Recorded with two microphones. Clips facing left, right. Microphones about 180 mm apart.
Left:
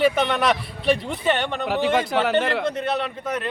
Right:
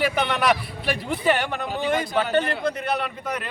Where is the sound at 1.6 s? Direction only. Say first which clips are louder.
Left 6 dB; 85° left.